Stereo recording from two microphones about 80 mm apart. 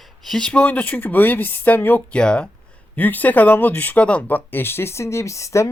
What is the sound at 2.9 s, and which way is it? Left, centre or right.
Speech, left.